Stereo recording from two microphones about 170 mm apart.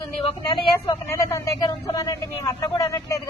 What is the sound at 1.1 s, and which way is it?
A woman's voice, 20° left (ahead or behind).